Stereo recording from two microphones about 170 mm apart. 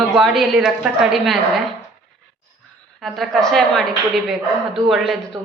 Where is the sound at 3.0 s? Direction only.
Centre (ahead or behind).